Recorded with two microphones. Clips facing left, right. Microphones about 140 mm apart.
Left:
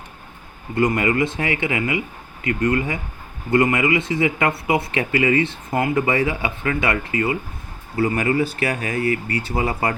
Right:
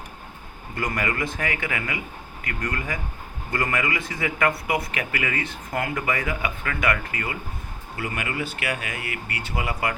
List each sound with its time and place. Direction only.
0.8 s speech: 25° left (ahead or behind)
7.9 s speech: 40° left (ahead or behind)